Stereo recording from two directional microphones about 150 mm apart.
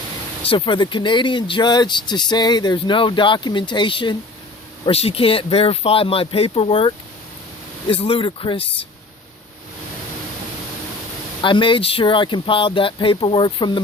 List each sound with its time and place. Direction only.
0.4 s speech: 35° left (ahead or behind)
11.4 s speech: 35° left (ahead or behind)